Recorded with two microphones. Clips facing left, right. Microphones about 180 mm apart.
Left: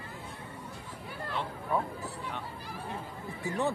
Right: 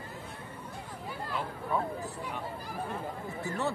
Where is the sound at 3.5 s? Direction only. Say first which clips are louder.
Left 3 dB; 15° left (ahead or behind).